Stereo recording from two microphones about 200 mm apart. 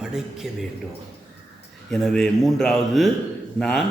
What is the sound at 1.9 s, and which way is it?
Speech, 5° left (ahead or behind).